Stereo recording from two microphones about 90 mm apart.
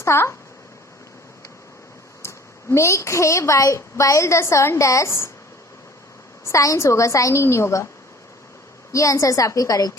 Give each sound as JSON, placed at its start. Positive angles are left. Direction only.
{"t": 0.0, "sound": "a woman's voice", "side_deg": 30}
{"t": 2.2, "sound": "a woman's voice", "side_deg": 30}
{"t": 6.4, "sound": "a woman's voice", "side_deg": 35}
{"t": 8.9, "sound": "a woman's voice", "side_deg": 35}